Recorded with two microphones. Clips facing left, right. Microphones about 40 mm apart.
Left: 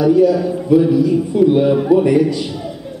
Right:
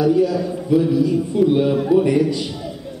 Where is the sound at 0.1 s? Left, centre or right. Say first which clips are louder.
Left 5 dB; centre.